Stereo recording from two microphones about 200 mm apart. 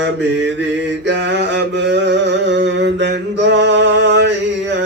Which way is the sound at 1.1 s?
60° right (ahead or behind).